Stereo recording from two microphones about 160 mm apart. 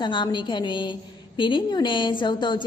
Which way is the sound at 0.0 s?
30° left (ahead or behind).